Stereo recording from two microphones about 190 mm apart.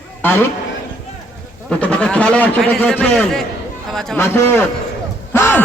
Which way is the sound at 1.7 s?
5° left (ahead or behind).